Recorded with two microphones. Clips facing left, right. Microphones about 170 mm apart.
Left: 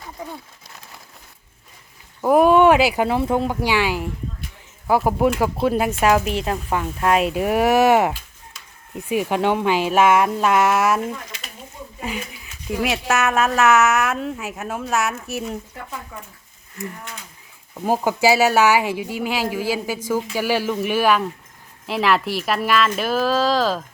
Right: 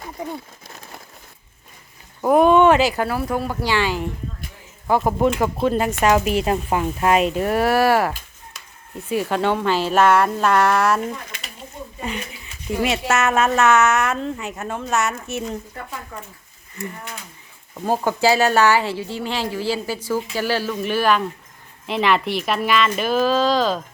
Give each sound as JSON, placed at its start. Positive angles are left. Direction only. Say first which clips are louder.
{"t": 2.2, "sound": "speech", "louder": "even", "side_deg": 5}
{"t": 11.3, "sound": "a sound", "louder": "even", "side_deg": -55}
{"t": 11.9, "sound": "speech", "louder": "even", "side_deg": 5}